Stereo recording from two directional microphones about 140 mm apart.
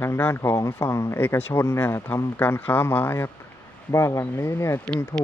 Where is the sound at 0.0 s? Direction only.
15° left (ahead or behind).